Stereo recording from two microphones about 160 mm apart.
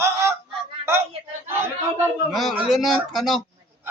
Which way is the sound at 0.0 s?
15° right (ahead or behind).